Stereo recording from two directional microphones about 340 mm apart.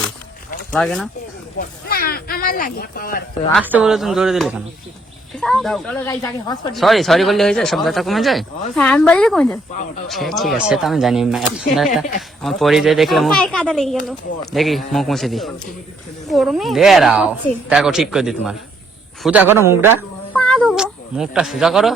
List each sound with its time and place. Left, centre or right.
0.7 s speech: centre
1.5 s speech: left
3.5 s a man's voice: centre
20.3 s cat: centre